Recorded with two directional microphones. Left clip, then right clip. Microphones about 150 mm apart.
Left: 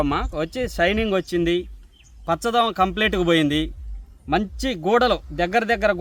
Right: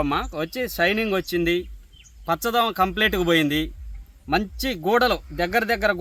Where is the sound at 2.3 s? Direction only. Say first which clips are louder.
Left 1 dB; 25° left (ahead or behind).